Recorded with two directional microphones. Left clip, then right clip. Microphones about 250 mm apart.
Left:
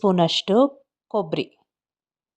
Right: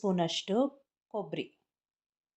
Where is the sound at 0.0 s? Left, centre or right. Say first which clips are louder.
Left 12 dB; left.